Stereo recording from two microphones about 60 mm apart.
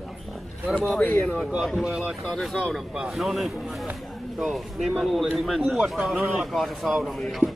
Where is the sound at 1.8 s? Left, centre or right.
Centre.